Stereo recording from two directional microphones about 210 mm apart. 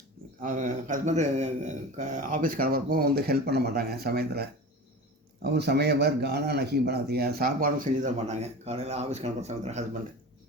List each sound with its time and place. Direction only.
0.4 s a man's voice: 35° right (ahead or behind)